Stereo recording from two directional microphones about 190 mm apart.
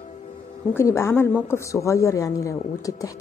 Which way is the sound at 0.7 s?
15° left (ahead or behind).